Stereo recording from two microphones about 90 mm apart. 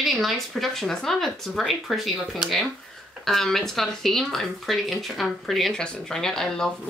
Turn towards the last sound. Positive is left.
turn(degrees=5)  # may be behind; listen again after turning